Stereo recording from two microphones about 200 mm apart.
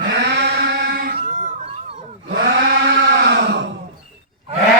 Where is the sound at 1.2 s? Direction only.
40° right (ahead or behind).